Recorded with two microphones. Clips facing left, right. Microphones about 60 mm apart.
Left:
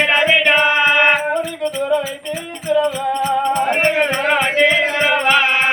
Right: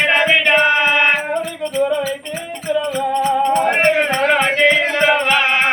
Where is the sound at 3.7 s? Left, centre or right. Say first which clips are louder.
Right 2 dB; right.